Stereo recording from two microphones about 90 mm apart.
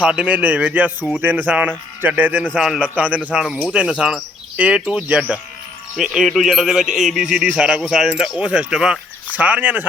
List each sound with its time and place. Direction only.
0.0 s speech: 10° right (ahead or behind)
2.6 s speech: 5° right (ahead or behind)